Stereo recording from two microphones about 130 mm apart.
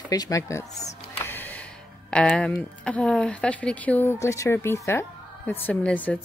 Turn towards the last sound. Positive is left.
turn(degrees=10)  # may be behind; listen again after turning